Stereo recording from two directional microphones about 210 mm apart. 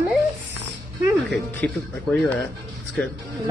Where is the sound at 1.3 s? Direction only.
5° left (ahead or behind).